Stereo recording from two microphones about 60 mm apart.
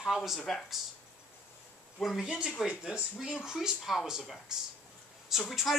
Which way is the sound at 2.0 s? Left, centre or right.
Centre.